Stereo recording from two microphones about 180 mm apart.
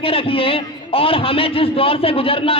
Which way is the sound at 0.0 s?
30° left (ahead or behind).